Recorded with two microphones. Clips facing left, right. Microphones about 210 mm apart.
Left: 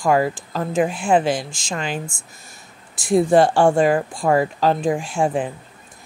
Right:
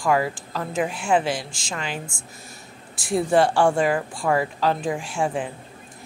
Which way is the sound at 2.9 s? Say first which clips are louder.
Left 5 dB; 45° left (ahead or behind).